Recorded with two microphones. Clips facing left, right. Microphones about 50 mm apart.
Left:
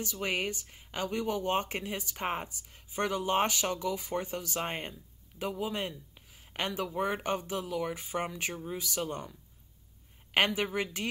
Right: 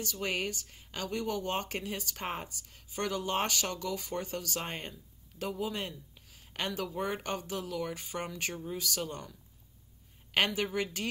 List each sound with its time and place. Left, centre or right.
0.0 s speech: centre